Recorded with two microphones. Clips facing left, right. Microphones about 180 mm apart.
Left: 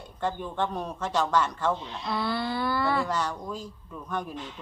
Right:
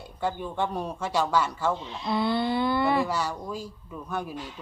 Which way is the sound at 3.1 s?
10° right (ahead or behind).